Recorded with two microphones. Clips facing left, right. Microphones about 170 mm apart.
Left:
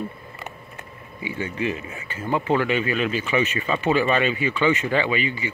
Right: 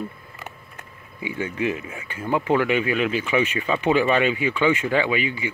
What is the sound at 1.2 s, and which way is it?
Speech, 15° right (ahead or behind).